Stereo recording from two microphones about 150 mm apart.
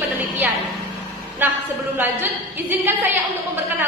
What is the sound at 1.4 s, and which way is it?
A woman's voice, 15° right (ahead or behind).